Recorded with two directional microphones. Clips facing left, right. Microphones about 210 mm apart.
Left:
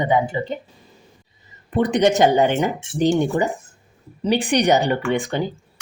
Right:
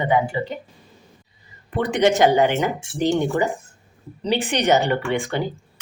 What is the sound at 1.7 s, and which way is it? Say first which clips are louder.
Speech: left 2 dB; 20° left (ahead or behind).